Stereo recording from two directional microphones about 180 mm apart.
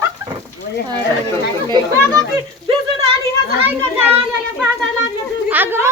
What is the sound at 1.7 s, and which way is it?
Speech, 20° right (ahead or behind).